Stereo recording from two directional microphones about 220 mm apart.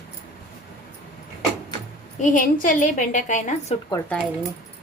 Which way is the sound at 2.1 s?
35° left (ahead or behind).